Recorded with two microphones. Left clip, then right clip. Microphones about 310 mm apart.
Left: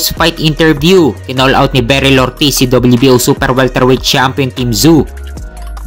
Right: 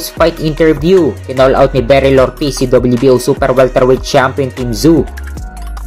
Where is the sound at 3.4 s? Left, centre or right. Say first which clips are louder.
Right 2 dB; left.